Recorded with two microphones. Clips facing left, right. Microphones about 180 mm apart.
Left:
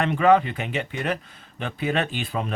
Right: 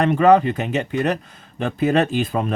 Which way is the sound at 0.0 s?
40° right (ahead or behind).